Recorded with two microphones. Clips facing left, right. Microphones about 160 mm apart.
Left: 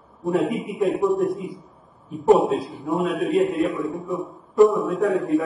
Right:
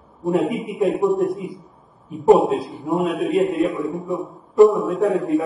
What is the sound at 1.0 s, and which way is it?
A man's voice, centre (ahead or behind).